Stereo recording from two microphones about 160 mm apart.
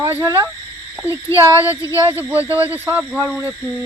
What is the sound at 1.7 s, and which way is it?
Speech, 20° left (ahead or behind).